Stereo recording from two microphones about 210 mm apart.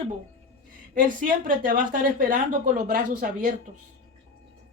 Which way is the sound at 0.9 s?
40° right (ahead or behind).